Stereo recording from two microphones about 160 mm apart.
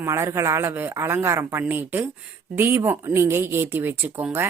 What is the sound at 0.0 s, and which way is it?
Speech, 20° right (ahead or behind).